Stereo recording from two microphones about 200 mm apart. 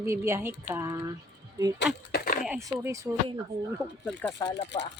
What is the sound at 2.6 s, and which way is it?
Speech, 15° right (ahead or behind).